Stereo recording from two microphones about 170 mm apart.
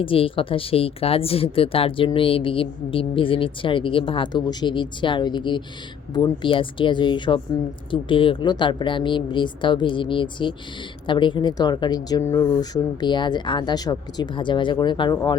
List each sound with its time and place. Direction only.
0.0 s speech: 30° left (ahead or behind)